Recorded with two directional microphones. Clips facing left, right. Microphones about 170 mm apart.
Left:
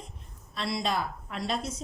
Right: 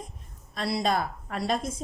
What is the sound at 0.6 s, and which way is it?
Speech, 40° right (ahead or behind).